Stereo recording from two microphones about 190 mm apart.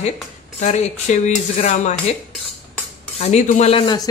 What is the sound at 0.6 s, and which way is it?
Speech, 40° left (ahead or behind).